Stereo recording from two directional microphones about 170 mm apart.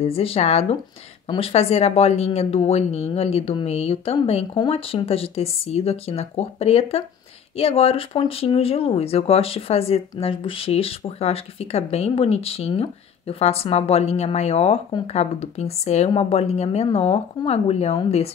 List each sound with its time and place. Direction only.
0.0 s speech: 35° left (ahead or behind)